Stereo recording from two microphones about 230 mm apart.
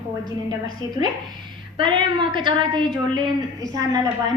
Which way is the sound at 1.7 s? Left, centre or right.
Right.